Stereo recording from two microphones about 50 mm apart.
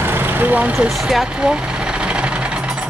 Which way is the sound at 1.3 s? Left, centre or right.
Centre.